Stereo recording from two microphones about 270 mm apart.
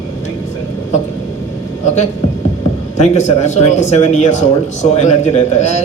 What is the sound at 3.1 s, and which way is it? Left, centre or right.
Speech, left.